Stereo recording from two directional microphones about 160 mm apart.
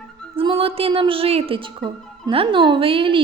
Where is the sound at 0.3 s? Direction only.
35° right (ahead or behind).